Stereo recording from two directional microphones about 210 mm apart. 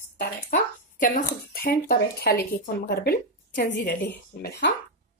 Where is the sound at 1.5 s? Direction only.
45° left (ahead or behind).